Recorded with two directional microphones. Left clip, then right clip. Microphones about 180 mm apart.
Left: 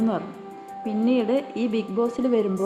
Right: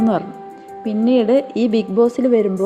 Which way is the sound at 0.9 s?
30° right (ahead or behind).